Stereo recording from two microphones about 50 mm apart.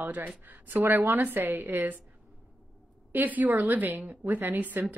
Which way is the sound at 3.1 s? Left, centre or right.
Right.